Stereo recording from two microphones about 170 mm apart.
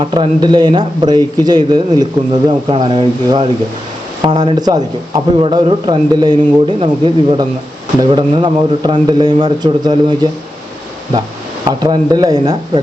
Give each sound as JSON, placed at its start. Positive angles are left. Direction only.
{"t": 0.0, "sound": "a man's voice", "side_deg": -30}
{"t": 11.8, "sound": "a man's voice", "side_deg": -25}